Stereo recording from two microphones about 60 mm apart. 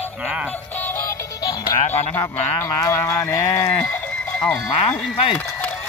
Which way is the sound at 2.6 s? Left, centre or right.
Left.